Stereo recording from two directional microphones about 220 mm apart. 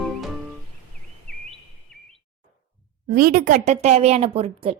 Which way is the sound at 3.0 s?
40° right (ahead or behind).